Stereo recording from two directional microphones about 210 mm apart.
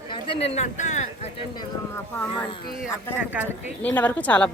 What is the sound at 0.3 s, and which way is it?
Speech, 30° left (ahead or behind).